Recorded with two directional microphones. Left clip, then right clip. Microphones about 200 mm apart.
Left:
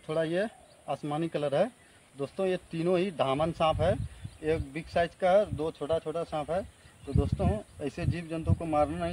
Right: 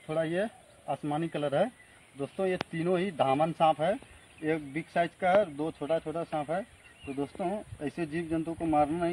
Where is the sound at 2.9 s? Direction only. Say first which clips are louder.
Left 2 dB; 25° left (ahead or behind).